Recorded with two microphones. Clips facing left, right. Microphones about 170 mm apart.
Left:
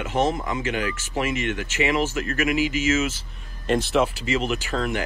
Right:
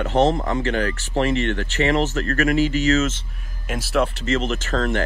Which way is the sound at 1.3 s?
15° left (ahead or behind).